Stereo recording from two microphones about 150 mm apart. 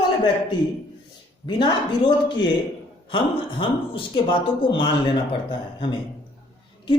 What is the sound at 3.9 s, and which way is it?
Speech, 35° left (ahead or behind).